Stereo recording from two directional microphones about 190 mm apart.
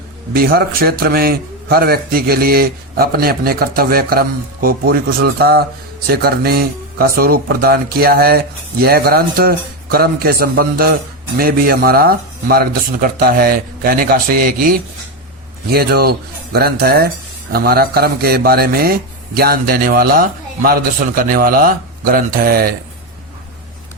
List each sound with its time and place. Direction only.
0.3 s a man's voice: 50° right (ahead or behind)